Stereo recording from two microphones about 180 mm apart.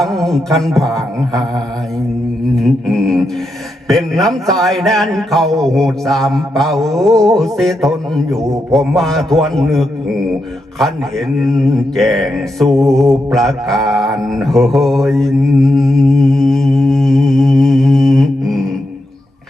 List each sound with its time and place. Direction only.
0.0 s mantra: centre (ahead or behind)
2.6 s mantra: centre (ahead or behind)
11.3 s mantra: centre (ahead or behind)